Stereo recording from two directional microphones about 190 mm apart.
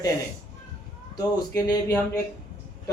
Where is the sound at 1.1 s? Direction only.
20° left (ahead or behind).